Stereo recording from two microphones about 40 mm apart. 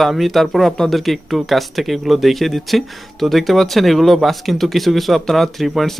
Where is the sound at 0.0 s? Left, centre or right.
Centre.